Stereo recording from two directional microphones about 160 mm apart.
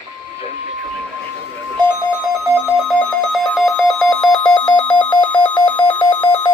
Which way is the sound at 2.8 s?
5° left (ahead or behind).